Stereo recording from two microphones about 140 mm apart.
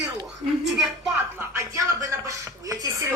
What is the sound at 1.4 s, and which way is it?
Speech, 20° right (ahead or behind).